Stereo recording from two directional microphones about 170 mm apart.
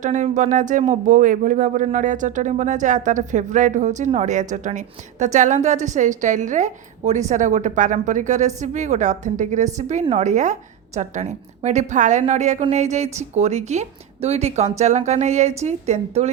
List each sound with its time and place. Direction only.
0.0 s a woman's voice: 45° right (ahead or behind)